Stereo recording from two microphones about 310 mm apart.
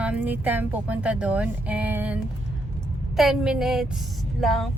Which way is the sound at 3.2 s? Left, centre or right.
Centre.